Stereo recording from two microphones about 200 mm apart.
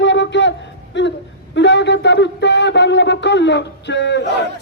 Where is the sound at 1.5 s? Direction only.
60° left (ahead or behind).